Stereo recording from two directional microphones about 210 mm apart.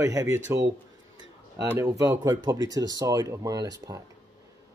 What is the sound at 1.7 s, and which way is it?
Speech, 15° right (ahead or behind).